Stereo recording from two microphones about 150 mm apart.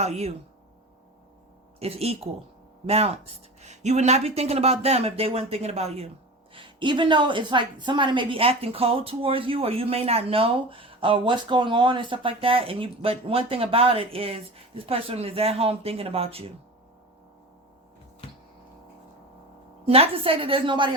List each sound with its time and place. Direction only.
0.0 s speech: 45° right (ahead or behind)
1.8 s speech: 40° right (ahead or behind)
6.5 s a woman's voice: 35° right (ahead or behind)
19.9 s a woman's voice: 40° right (ahead or behind)